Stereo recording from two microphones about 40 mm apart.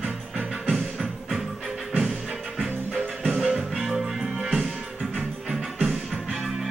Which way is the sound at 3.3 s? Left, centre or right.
Centre.